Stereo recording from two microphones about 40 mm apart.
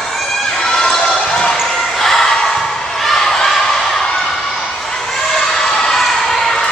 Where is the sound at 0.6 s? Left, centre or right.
Centre.